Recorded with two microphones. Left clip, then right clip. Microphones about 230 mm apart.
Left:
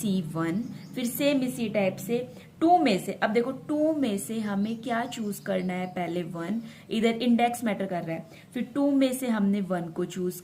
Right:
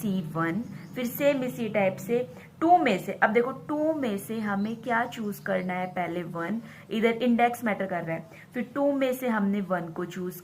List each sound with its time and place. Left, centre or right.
0.0 s a woman's voice: left